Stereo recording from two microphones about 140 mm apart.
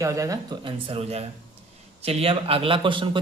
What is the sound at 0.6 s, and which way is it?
Speech, 40° right (ahead or behind).